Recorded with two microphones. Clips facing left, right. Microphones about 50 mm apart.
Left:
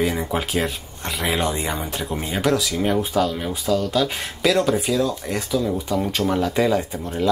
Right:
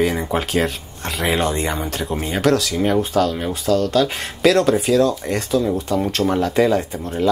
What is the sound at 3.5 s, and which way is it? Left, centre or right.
Speech, centre.